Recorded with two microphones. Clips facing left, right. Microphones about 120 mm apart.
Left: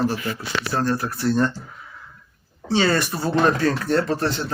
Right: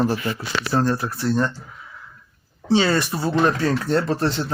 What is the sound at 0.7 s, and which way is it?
Speech, 25° right (ahead or behind).